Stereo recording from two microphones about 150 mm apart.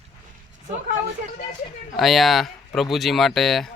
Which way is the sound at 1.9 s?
Centre (ahead or behind).